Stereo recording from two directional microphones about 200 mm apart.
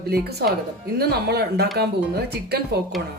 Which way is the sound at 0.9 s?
55° right (ahead or behind).